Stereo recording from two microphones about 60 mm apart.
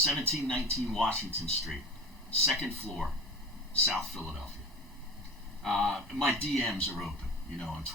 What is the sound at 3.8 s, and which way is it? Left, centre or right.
Speech, centre.